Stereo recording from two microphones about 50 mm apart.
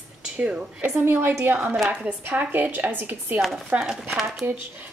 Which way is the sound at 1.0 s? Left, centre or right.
Right.